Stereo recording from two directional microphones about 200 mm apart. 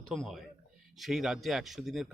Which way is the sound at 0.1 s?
Centre (ahead or behind).